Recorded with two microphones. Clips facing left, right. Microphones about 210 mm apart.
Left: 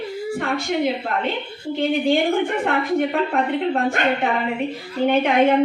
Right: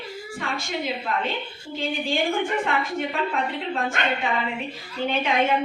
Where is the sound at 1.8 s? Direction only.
65° left (ahead or behind).